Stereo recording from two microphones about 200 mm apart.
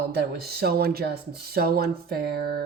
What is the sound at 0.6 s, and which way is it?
A woman's voice, 50° right (ahead or behind).